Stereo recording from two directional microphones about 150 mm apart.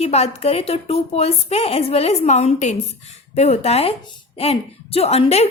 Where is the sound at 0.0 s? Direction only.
45° left (ahead or behind).